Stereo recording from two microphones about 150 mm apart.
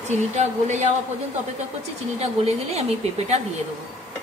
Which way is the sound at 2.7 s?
45° right (ahead or behind).